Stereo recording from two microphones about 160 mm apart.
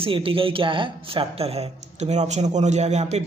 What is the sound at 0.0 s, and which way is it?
A man's voice, 35° right (ahead or behind).